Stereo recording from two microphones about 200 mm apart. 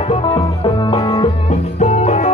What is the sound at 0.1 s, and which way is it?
Music, 30° left (ahead or behind).